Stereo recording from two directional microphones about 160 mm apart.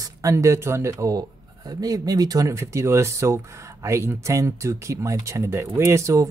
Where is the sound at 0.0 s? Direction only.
20° right (ahead or behind).